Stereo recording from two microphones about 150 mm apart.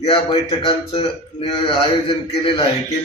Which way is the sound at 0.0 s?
35° left (ahead or behind).